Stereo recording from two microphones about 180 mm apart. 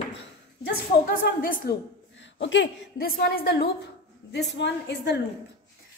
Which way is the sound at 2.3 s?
85° left.